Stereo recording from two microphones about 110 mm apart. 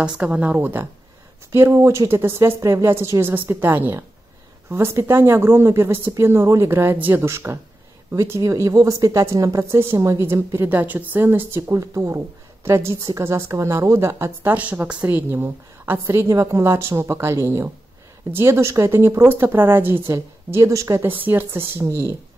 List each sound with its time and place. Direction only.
0.0 s a woman's voice: 10° right (ahead or behind)